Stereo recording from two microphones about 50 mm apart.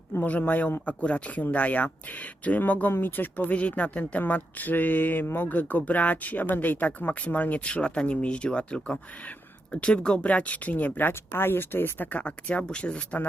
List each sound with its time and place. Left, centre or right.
0.2 s speech: left
5.5 s speech: left
12.2 s speech: left